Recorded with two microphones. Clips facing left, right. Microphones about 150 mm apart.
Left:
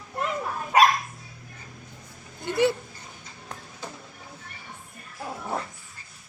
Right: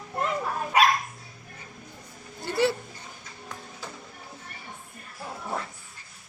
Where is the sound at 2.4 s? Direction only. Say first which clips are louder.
Left 2 dB; 20° left (ahead or behind).